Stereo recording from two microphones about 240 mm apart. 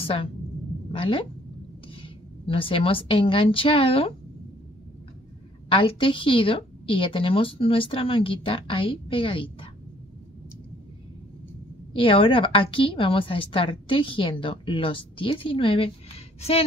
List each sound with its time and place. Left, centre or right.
0.0 s a woman's voice: left
5.7 s a woman's voice: left
11.9 s a woman's voice: left